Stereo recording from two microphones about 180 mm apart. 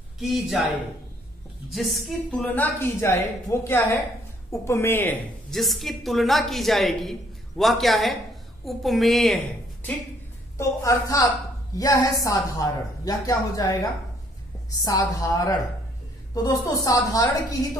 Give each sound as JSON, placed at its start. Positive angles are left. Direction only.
{"t": 0.2, "sound": "a woman's voice", "side_deg": 0}
{"t": 1.7, "sound": "a woman's voice", "side_deg": 0}
{"t": 10.6, "sound": "a woman's voice", "side_deg": 15}